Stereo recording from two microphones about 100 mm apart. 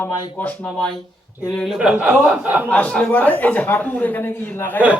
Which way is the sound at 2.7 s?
15° left (ahead or behind).